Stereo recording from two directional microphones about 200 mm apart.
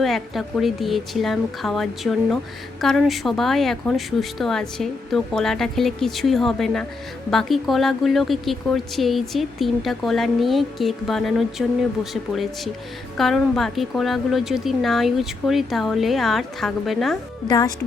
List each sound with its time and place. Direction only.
0.0 s speech: centre (ahead or behind)
17.5 s speech: 20° left (ahead or behind)